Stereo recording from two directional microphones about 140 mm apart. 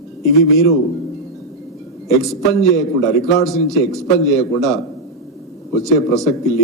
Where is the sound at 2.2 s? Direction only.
Centre (ahead or behind).